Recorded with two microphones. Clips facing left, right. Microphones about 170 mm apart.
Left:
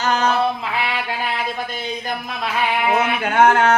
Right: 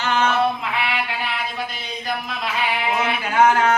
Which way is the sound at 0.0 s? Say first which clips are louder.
Left 2 dB; 40° left (ahead or behind).